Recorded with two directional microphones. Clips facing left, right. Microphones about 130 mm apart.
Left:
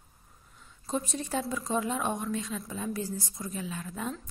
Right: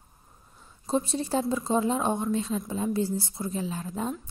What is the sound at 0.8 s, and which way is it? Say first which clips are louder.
Speech: right 5 dB; 30° right (ahead or behind).